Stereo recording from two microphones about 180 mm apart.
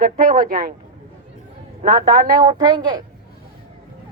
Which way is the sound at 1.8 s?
50° right (ahead or behind).